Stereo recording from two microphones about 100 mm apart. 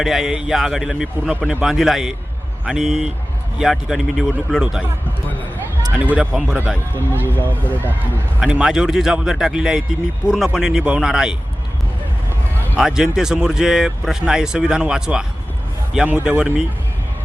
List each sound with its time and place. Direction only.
0.0 s a man's voice: 5° right (ahead or behind)
5.9 s speech: 15° right (ahead or behind)
7.3 s speech: 20° left (ahead or behind)
8.4 s a man's voice: 5° right (ahead or behind)
12.7 s speech: 5° right (ahead or behind)